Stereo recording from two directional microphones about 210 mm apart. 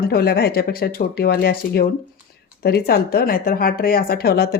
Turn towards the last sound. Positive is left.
turn(degrees=50)  # may be behind; listen again after turning